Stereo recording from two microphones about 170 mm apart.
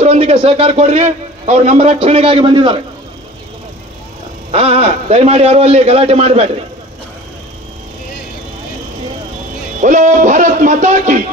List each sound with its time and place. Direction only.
0.0 s a man's voice: 35° right (ahead or behind)
4.5 s a man's voice: 35° right (ahead or behind)
9.8 s speech: 45° right (ahead or behind)